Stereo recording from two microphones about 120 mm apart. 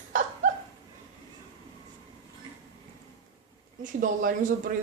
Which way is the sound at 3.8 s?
90° right.